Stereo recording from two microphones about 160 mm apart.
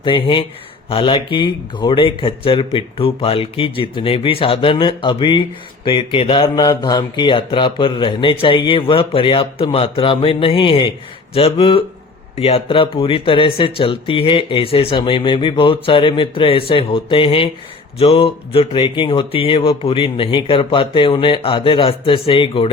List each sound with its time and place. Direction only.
0.0 s speech: 30° left (ahead or behind)